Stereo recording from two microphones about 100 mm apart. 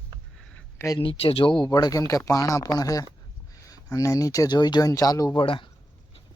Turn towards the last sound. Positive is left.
turn(degrees=60)  # may be behind; listen again after turning